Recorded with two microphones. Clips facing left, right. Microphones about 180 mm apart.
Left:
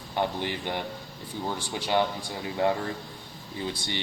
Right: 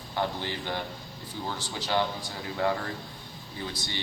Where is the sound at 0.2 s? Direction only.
20° left (ahead or behind).